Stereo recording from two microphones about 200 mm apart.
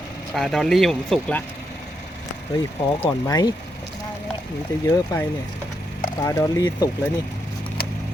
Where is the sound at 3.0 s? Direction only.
15° left (ahead or behind).